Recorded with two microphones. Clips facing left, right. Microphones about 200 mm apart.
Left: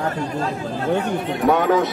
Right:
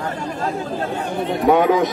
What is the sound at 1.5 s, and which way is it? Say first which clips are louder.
Speech: right 2 dB; 15° right (ahead or behind).